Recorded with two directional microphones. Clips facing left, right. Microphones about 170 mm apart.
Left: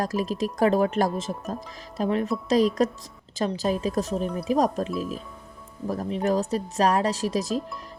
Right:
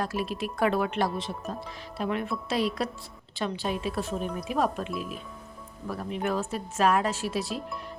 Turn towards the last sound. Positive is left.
turn(degrees=40)  # may be behind; listen again after turning